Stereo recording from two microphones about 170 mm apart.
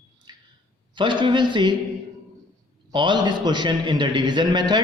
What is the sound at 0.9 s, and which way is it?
Speech, 25° right (ahead or behind).